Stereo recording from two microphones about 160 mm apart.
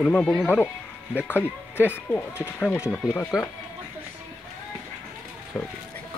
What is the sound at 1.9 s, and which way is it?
Speech, 10° left (ahead or behind).